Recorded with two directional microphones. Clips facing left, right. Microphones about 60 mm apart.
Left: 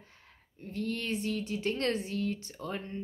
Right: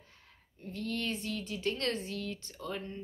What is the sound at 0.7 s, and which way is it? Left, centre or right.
Speech, left.